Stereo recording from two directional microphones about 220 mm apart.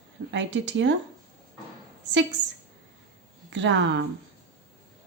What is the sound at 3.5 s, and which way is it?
Speech, 55° right (ahead or behind).